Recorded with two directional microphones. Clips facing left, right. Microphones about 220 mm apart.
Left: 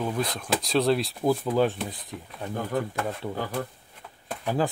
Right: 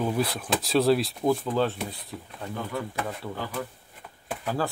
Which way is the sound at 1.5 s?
15° left (ahead or behind).